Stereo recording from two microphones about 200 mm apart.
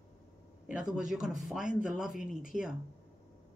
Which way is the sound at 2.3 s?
40° left (ahead or behind).